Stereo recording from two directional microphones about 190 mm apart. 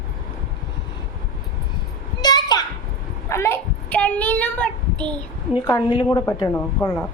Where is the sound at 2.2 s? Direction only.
20° left (ahead or behind).